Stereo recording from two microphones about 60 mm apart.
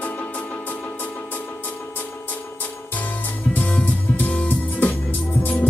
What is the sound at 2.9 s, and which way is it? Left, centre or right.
Music, left.